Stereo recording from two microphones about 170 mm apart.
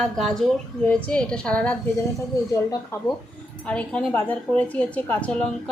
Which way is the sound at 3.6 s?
5° left (ahead or behind).